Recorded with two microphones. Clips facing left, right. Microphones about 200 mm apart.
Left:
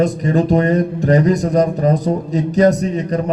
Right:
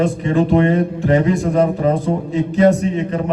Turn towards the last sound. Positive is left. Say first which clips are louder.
# even
turn(degrees=40)  # may be behind; listen again after turning